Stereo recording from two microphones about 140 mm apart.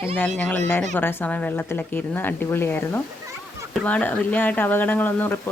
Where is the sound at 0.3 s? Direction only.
10° left (ahead or behind).